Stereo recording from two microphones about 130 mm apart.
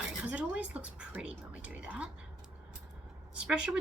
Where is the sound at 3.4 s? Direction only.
5° right (ahead or behind).